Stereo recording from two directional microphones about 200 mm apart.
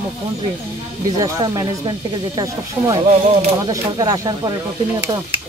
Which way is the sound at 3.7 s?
20° right (ahead or behind).